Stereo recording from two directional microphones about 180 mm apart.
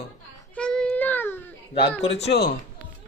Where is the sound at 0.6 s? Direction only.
5° left (ahead or behind).